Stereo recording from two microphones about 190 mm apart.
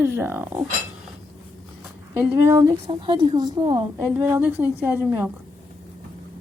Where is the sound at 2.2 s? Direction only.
15° right (ahead or behind).